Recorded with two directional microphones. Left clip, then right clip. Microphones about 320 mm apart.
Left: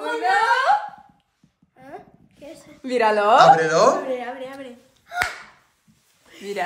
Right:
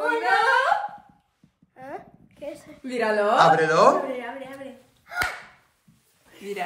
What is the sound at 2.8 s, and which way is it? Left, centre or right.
Speech, centre.